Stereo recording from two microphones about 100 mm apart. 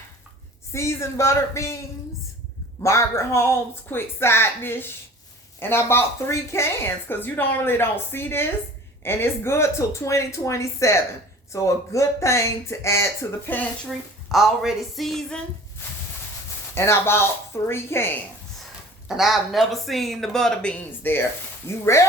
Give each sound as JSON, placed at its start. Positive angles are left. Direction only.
{"t": 0.7, "sound": "a woman's voice", "side_deg": 30}
{"t": 2.8, "sound": "a woman's voice", "side_deg": 30}
{"t": 14.3, "sound": "speech", "side_deg": 0}
{"t": 16.7, "sound": "a woman's voice", "side_deg": 25}
{"t": 19.0, "sound": "speech", "side_deg": -5}
{"t": 21.9, "sound": "a woman's voice", "side_deg": 30}